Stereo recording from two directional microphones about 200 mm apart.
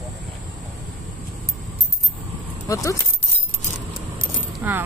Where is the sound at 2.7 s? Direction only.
15° left (ahead or behind).